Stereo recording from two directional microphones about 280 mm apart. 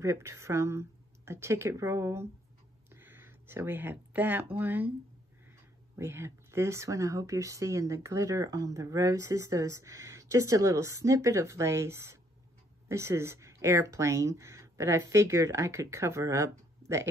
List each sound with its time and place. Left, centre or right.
0.0 s speech: centre
5.9 s speech: centre